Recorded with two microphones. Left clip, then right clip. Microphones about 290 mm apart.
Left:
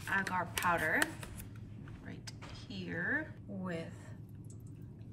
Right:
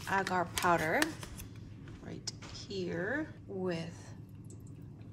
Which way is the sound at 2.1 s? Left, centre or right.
Centre.